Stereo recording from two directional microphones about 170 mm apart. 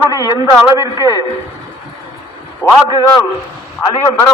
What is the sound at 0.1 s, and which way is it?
Speech, 20° left (ahead or behind).